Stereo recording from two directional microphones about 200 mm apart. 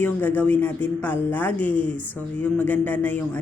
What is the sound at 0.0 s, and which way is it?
Speech, 10° left (ahead or behind).